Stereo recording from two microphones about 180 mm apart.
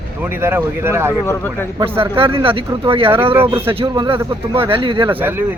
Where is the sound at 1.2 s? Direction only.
10° left (ahead or behind).